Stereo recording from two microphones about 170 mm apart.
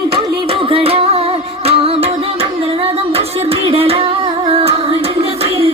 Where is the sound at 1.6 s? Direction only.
35° right (ahead or behind).